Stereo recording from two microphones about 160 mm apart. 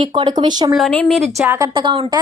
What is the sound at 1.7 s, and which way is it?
Speech, 30° right (ahead or behind).